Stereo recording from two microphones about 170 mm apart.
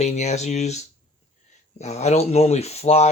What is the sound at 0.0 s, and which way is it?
Speech, 40° left (ahead or behind).